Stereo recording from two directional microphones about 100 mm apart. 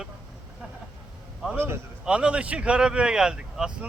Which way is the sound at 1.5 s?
25° right (ahead or behind).